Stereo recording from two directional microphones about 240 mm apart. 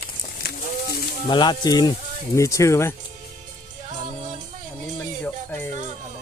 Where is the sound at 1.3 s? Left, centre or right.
Centre.